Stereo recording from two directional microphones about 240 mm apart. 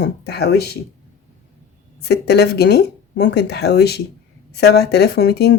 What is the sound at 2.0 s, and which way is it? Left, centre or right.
Speech, left.